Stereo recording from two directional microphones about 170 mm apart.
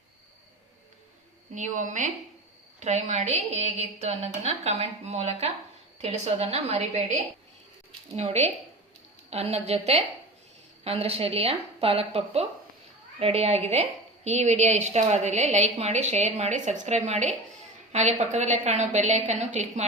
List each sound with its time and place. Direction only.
1.5 s a woman's voice: 45° right (ahead or behind)
8.1 s a woman's voice: 40° right (ahead or behind)
11.0 s a woman's voice: 35° right (ahead or behind)